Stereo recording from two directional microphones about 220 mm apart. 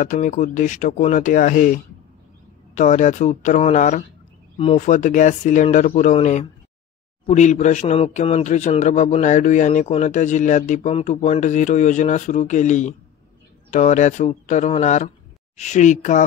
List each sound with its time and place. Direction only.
0.0 s a man's voice: 35° left (ahead or behind)